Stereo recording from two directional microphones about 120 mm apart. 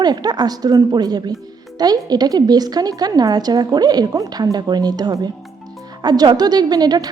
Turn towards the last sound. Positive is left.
turn(degrees=-35)  # may be behind; listen again after turning